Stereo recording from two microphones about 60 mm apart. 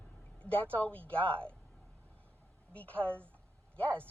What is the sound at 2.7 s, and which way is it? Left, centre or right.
Speech, left.